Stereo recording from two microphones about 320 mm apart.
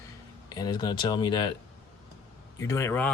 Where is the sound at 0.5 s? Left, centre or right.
Centre.